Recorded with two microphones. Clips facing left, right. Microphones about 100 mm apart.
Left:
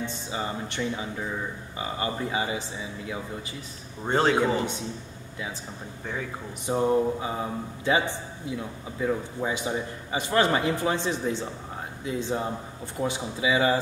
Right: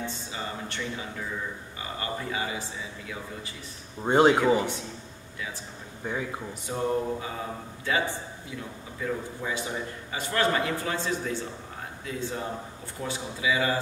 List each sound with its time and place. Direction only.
0.0 s a man's voice: 20° left (ahead or behind)
4.0 s speech: 15° right (ahead or behind)
6.0 s speech: 15° right (ahead or behind)
6.6 s a man's voice: 20° left (ahead or behind)